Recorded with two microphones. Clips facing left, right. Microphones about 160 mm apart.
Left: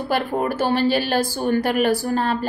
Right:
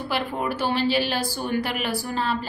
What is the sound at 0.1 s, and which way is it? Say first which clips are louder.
A woman's voice: left 5 dB; 45° left (ahead or behind).